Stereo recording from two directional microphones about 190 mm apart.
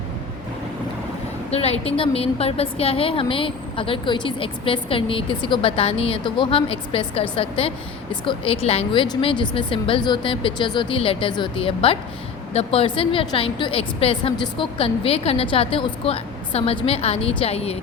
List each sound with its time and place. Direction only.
1.5 s a woman's voice: 30° left (ahead or behind)